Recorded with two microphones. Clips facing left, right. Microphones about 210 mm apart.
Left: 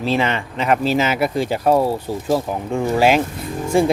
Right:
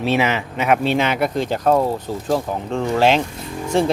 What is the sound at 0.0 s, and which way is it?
Speech, 5° right (ahead or behind).